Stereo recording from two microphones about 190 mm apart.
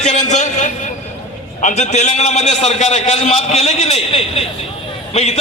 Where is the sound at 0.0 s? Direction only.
35° left (ahead or behind).